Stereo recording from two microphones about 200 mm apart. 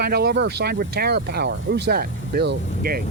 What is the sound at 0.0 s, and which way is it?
Speech, 50° right (ahead or behind).